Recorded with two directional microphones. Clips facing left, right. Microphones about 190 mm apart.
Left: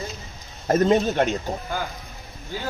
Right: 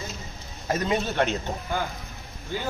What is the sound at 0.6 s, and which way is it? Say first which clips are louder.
Speech: left 7 dB; 45° left (ahead or behind).